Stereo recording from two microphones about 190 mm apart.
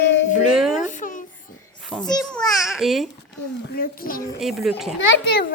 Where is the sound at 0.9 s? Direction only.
45° left (ahead or behind).